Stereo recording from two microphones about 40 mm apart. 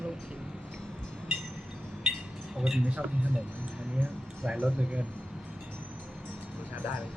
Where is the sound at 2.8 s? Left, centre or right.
Right.